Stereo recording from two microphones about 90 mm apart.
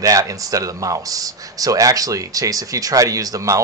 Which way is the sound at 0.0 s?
40° right (ahead or behind).